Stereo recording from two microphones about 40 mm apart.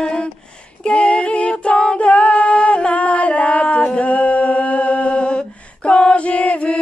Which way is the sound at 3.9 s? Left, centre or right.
Left.